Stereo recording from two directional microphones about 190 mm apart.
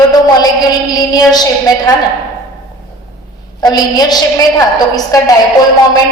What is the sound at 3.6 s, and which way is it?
A woman's voice, 20° left (ahead or behind).